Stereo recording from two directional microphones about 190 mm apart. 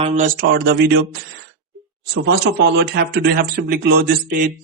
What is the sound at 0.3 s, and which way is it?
Speech, 55° right (ahead or behind).